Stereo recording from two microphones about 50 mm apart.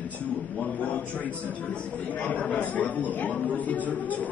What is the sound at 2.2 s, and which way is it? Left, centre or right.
Speech, left.